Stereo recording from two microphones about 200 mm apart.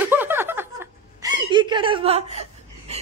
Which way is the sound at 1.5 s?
25° right (ahead or behind).